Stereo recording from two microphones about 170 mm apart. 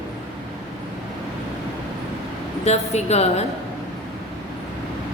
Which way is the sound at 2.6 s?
40° left (ahead or behind).